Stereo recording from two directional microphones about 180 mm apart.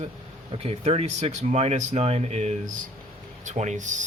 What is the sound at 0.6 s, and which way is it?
Speech, 35° right (ahead or behind).